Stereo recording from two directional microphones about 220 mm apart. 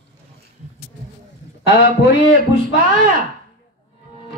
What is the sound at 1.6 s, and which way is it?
Speech, 55° left (ahead or behind).